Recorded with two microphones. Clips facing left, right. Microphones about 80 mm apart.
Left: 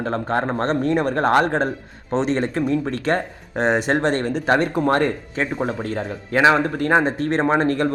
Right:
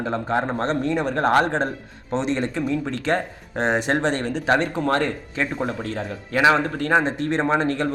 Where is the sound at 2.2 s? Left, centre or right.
Left.